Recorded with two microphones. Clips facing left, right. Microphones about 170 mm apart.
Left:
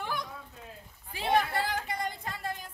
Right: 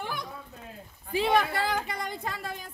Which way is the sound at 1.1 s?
90° right.